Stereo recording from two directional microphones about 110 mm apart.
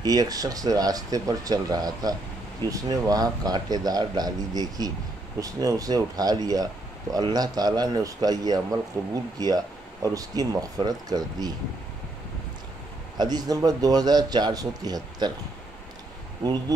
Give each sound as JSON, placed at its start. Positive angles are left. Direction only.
{"t": 0.0, "sound": "speech", "side_deg": -35}
{"t": 13.2, "sound": "speech", "side_deg": -35}
{"t": 16.4, "sound": "speech", "side_deg": -35}